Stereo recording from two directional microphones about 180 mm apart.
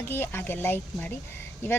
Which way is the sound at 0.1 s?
10° left (ahead or behind).